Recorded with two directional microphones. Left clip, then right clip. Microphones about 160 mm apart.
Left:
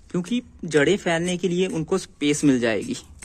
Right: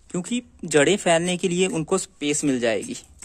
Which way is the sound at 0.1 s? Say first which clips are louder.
Left 1 dB; 25° right (ahead or behind).